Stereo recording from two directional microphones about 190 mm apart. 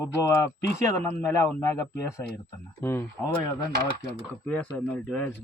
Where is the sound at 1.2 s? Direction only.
15° left (ahead or behind).